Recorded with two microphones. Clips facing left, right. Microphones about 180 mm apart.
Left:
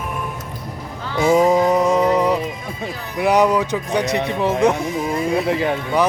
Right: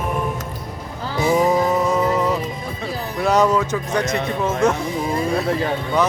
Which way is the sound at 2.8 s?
15° left (ahead or behind).